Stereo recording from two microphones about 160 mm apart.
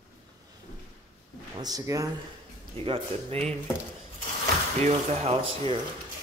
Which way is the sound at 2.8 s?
35° right (ahead or behind).